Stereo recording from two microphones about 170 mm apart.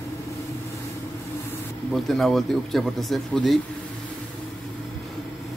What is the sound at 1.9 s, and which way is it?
Speech, centre (ahead or behind).